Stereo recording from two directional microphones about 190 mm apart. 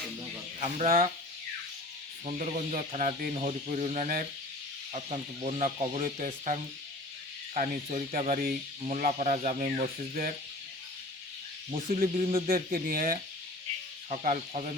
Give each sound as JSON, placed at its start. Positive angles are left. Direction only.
{"t": 0.6, "sound": "speech", "side_deg": -45}
{"t": 2.2, "sound": "speech", "side_deg": -40}
{"t": 3.3, "sound": "speech", "side_deg": -35}
{"t": 8.8, "sound": "speech", "side_deg": -40}
{"t": 11.9, "sound": "speech", "side_deg": -40}
{"t": 12.5, "sound": "speech", "side_deg": -50}